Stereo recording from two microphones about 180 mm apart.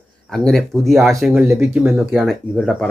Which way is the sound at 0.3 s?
Centre (ahead or behind).